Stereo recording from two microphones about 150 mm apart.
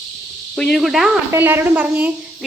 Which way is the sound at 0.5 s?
5° left (ahead or behind).